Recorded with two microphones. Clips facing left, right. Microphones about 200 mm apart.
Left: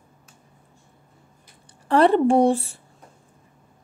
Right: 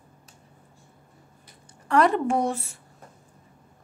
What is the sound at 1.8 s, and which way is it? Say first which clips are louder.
Speech: left 5 dB; 30° left (ahead or behind).